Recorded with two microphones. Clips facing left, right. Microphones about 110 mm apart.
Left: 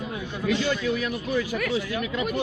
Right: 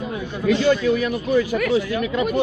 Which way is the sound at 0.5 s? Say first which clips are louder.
Right 8 dB; 75° right (ahead or behind).